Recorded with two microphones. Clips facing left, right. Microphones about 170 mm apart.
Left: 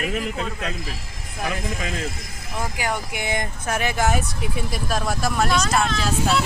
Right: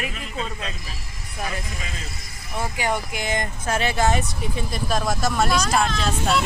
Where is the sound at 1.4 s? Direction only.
80° left.